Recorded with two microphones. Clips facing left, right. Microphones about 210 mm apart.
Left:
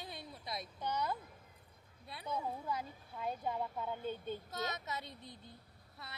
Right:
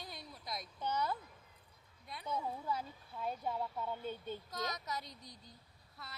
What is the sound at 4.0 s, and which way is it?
Speech, 50° left (ahead or behind).